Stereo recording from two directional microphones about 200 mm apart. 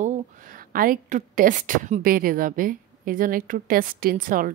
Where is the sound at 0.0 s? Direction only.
40° right (ahead or behind).